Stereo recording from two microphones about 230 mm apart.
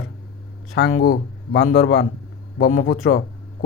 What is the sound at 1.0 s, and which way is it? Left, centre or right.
Speech, left.